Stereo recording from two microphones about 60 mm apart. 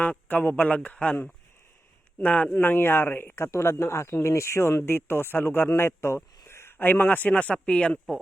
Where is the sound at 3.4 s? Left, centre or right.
Left.